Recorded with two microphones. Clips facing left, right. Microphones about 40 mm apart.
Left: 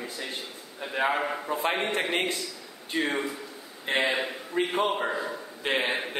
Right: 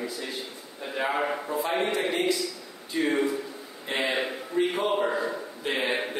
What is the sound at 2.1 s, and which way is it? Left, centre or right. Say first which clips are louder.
A man's voice: right 2 dB; left.